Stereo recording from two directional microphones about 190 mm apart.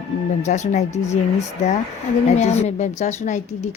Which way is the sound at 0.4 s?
40° left (ahead or behind).